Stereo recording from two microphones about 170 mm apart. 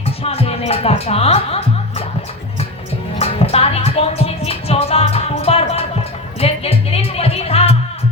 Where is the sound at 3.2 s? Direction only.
35° left (ahead or behind).